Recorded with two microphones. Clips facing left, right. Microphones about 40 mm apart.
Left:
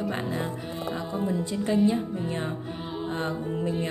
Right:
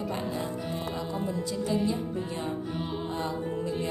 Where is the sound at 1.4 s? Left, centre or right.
Left.